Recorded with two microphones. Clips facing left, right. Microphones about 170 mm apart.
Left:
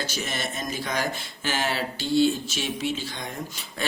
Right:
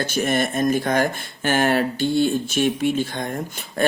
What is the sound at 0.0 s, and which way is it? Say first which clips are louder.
Speech: right 10 dB; 55° right (ahead or behind).